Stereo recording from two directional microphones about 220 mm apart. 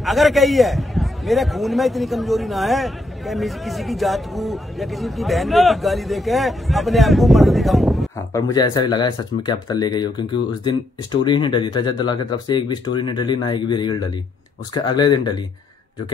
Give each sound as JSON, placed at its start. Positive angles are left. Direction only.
{"t": 0.0, "sound": "a man's voice", "side_deg": 0}
{"t": 8.3, "sound": "a man's voice", "side_deg": 15}